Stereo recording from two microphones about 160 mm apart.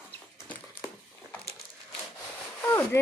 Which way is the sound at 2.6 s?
15° left (ahead or behind).